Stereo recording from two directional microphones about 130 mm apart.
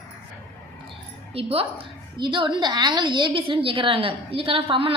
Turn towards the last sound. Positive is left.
turn(degrees=-45)  # may be behind; listen again after turning